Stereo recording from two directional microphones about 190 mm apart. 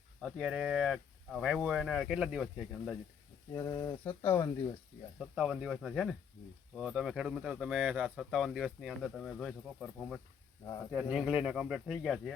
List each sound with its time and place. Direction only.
0.2 s speech: centre (ahead or behind)
3.5 s speech: 20° left (ahead or behind)
5.2 s speech: 5° right (ahead or behind)